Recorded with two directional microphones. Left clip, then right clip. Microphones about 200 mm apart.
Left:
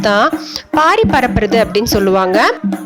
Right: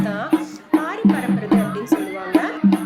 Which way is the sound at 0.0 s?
45° left (ahead or behind).